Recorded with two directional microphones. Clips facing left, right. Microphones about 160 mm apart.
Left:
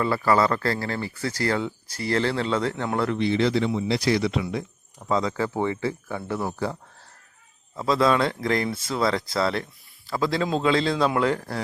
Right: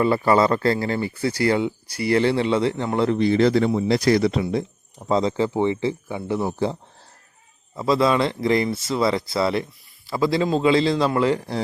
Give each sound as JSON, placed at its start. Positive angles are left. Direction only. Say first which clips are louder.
{"t": 0.0, "sound": "speech", "louder": "right 4 dB", "side_deg": -20}
{"t": 3.2, "sound": "speech", "louder": "right 5 dB", "side_deg": -45}
{"t": 7.8, "sound": "speech", "louder": "right 2 dB", "side_deg": -5}